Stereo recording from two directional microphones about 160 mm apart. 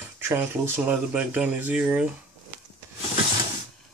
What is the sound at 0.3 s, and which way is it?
Speech, 15° right (ahead or behind).